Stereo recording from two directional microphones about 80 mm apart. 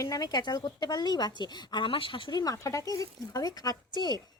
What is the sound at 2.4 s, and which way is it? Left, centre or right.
Speech, left.